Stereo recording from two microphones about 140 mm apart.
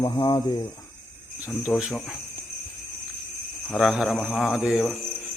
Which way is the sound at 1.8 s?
Centre (ahead or behind).